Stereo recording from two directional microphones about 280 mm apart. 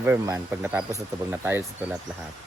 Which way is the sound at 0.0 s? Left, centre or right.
Centre.